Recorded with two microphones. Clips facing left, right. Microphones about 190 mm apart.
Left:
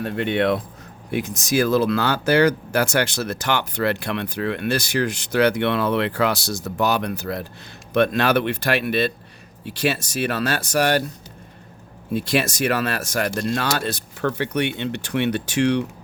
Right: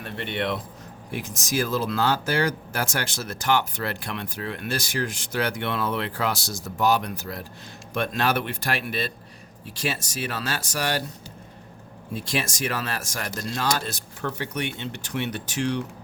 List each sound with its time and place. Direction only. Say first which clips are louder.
0.0 s speech: left 8 dB; 50° left (ahead or behind)
1.1 s speech: left 6 dB; 70° left (ahead or behind)
12.1 s speech: left 7 dB; 65° left (ahead or behind)